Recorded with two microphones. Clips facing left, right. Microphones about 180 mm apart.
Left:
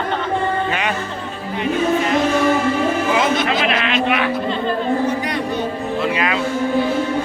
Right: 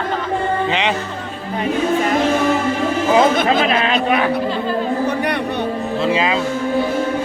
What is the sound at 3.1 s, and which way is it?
A man's voice, 45° right (ahead or behind).